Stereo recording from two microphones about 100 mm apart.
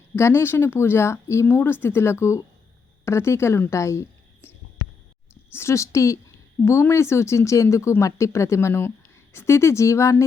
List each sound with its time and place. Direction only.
0.2 s speech: 25° left (ahead or behind)